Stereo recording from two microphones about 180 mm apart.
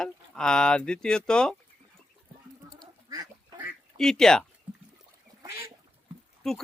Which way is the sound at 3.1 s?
25° right (ahead or behind).